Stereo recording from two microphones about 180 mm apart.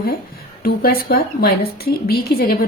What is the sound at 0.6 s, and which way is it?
A woman's voice, 55° left (ahead or behind).